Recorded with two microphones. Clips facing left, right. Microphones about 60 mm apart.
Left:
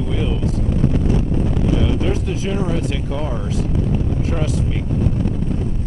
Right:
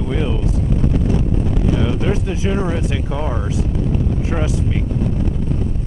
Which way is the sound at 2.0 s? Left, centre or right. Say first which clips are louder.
Right 2 dB; centre.